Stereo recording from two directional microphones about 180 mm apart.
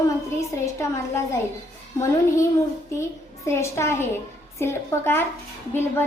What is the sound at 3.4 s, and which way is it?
A woman's voice, 15° left (ahead or behind).